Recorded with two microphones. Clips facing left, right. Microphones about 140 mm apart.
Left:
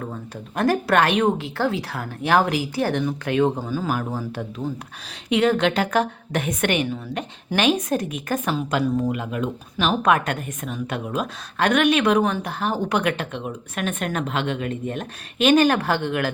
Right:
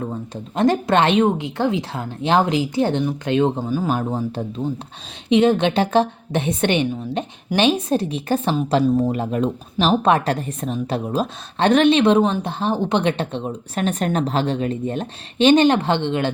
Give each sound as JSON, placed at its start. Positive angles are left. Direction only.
{"t": 0.0, "sound": "a woman's voice", "side_deg": -20}